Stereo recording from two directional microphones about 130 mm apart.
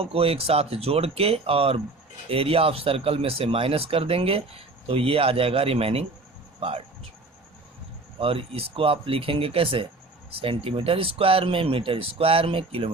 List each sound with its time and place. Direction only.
0.0 s speech: 45° right (ahead or behind)
8.2 s speech: 45° right (ahead or behind)